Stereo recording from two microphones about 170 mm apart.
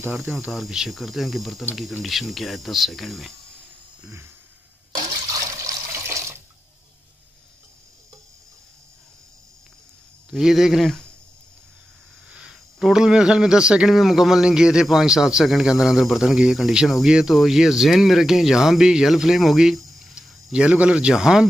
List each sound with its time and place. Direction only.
0.1 s speech: centre (ahead or behind)
4.9 s water: 20° right (ahead or behind)
10.3 s speech: centre (ahead or behind)
12.3 s speech: 5° right (ahead or behind)